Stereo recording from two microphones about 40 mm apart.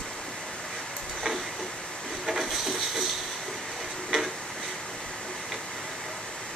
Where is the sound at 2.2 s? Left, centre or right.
Centre.